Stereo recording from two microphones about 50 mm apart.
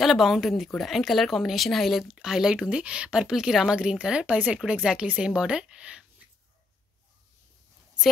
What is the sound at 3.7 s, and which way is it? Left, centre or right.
A woman's voice, centre.